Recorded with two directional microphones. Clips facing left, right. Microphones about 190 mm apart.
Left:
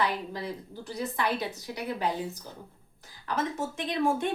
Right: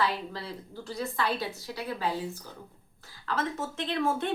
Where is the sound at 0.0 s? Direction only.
15° left (ahead or behind).